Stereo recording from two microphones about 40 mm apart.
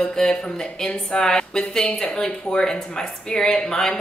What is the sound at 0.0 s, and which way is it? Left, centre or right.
A woman's voice, centre.